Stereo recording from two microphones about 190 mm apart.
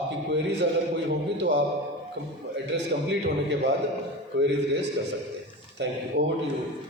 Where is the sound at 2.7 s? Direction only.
70° right (ahead or behind).